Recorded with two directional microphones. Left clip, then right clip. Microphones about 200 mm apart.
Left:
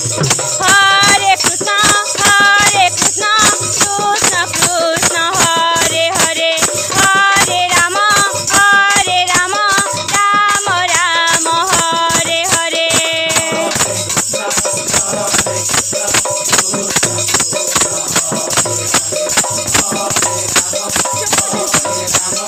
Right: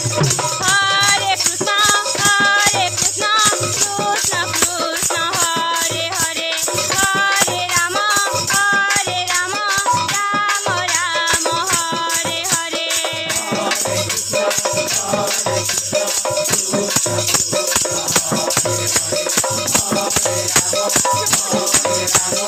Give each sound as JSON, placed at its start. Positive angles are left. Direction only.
{"t": 0.7, "sound": "music", "side_deg": 40}
{"t": 7.9, "sound": "music", "side_deg": 45}